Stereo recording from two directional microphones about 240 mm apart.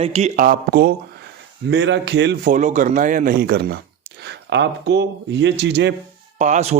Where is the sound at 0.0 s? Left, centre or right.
Right.